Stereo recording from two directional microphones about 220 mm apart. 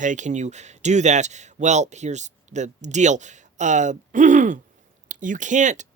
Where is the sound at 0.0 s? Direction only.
35° right (ahead or behind).